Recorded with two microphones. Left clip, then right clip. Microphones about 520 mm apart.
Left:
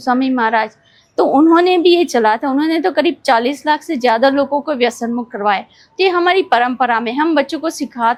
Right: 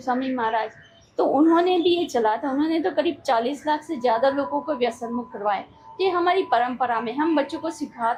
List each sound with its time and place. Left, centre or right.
0.0 s a woman's voice: left